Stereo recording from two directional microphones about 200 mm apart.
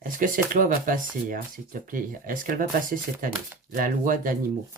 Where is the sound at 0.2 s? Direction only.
40° right (ahead or behind).